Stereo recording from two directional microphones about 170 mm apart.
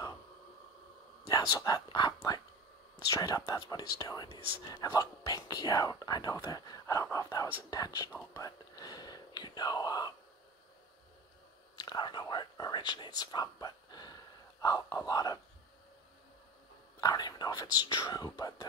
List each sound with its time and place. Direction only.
1.3 s speech: 20° left (ahead or behind)
11.7 s speech: 25° left (ahead or behind)
17.0 s speech: 25° left (ahead or behind)